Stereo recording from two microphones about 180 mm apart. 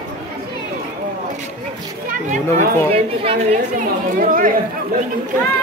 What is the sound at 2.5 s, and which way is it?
Speech, 10° left (ahead or behind).